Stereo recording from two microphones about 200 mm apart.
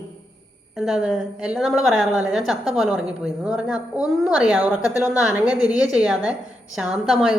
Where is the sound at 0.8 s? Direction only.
5° right (ahead or behind).